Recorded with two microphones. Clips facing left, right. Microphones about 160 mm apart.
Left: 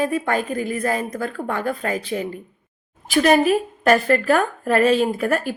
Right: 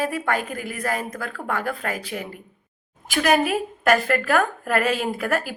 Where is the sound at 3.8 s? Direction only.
30° left (ahead or behind).